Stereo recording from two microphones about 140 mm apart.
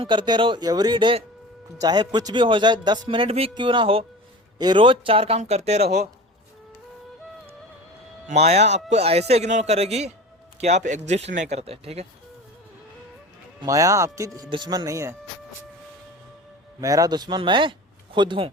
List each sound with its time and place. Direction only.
0.0 s a man's voice: 35° right (ahead or behind)
8.3 s speech: 50° right (ahead or behind)
13.6 s speech: 25° right (ahead or behind)
14.5 s speech: 35° right (ahead or behind)
16.8 s speech: 25° right (ahead or behind)